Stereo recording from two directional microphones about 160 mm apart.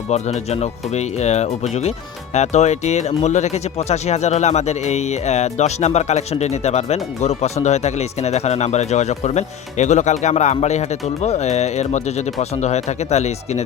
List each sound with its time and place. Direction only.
0.1 s speech: 40° left (ahead or behind)